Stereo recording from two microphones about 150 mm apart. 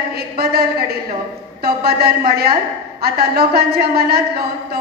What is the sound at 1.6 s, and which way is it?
A woman's voice, 90° right.